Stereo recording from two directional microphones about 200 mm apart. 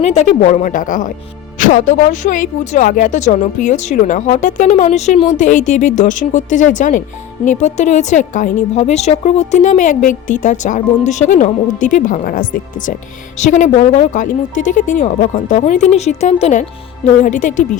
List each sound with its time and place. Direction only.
0.0 s a woman's voice: 35° left (ahead or behind)